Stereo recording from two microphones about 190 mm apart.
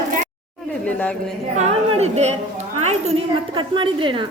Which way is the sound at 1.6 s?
35° right (ahead or behind).